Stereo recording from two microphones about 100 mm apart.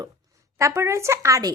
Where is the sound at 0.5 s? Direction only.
25° right (ahead or behind).